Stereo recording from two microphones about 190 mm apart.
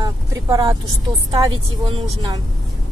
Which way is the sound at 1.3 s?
25° right (ahead or behind).